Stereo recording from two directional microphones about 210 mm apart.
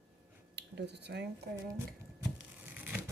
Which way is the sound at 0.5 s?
55° right (ahead or behind).